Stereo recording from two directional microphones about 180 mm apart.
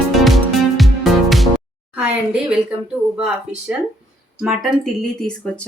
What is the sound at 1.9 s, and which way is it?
A woman's voice, 5° right (ahead or behind).